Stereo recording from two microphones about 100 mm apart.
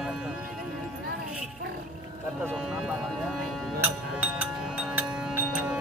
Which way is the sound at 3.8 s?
15° right (ahead or behind).